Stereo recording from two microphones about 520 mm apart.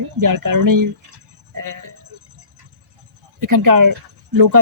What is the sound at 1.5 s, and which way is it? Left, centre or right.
Sheep, right.